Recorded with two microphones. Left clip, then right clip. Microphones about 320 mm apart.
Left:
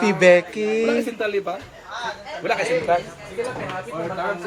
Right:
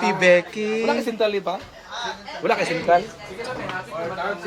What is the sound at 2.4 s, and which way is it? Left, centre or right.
Speech, right.